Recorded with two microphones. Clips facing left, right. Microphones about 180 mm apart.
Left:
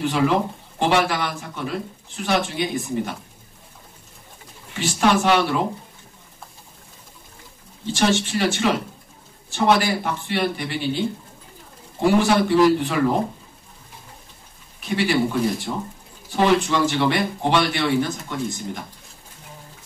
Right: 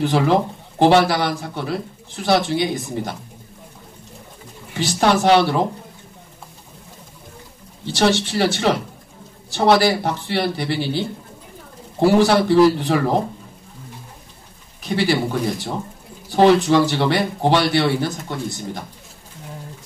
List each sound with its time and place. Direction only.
0.0 s speech: 35° right (ahead or behind)
4.7 s speech: 35° right (ahead or behind)
7.9 s speech: 35° right (ahead or behind)
14.8 s speech: 35° right (ahead or behind)
16.3 s speech: 35° right (ahead or behind)